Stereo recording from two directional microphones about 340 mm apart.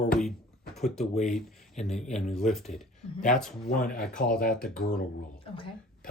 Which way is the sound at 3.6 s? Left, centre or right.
Left.